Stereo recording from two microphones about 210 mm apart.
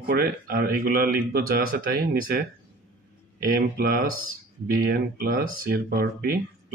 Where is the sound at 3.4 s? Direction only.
45° right (ahead or behind).